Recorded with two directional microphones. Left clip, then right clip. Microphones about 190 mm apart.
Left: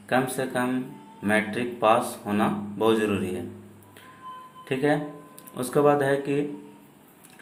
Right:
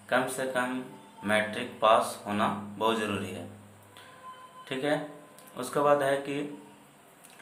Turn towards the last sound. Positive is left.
turn(degrees=20)  # may be behind; listen again after turning